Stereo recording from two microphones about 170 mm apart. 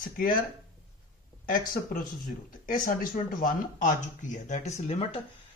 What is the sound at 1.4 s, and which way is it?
Speech, 55° left (ahead or behind).